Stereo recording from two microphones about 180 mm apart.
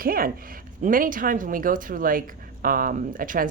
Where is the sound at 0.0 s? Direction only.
55° right (ahead or behind).